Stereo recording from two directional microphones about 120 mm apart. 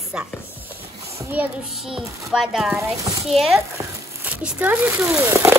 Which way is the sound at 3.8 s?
15° right (ahead or behind).